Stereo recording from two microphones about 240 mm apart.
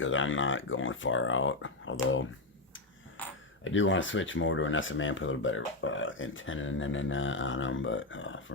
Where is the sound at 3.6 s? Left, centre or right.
Left.